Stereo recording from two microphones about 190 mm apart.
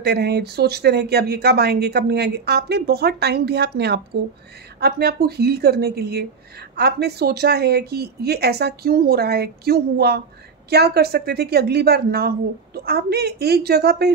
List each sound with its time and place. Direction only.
0.0 s speech: 60° right (ahead or behind)